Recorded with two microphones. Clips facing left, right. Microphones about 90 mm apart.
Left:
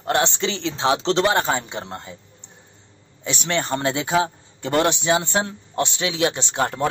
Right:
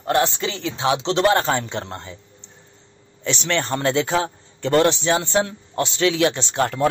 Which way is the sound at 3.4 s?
15° left (ahead or behind).